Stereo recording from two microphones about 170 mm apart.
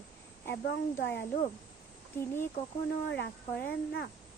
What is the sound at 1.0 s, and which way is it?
Speech, 85° left.